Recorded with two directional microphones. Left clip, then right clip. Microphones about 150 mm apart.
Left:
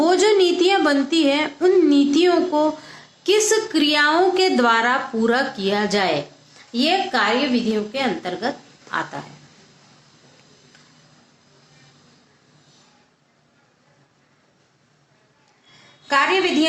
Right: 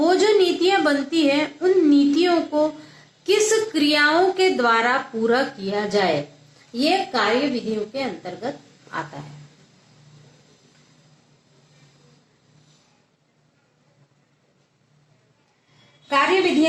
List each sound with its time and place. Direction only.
0.0 s a woman's voice: 30° left (ahead or behind)
7.2 s a woman's voice: 25° left (ahead or behind)
16.0 s a woman's voice: 30° left (ahead or behind)